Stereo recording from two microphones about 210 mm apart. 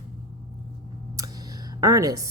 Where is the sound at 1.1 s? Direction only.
15° right (ahead or behind).